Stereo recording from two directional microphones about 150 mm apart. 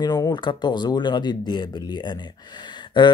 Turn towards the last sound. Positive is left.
turn(degrees=30)  # may be behind; listen again after turning